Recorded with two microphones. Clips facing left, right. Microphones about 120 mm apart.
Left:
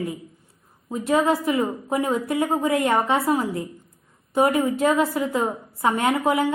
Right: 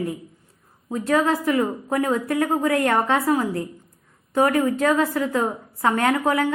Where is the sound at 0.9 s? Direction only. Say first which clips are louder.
Even; 15° left (ahead or behind).